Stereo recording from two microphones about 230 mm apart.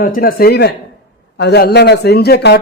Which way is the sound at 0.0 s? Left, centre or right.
Left.